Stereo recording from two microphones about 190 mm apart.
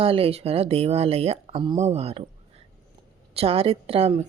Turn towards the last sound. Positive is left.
turn(degrees=-30)  # may be behind; listen again after turning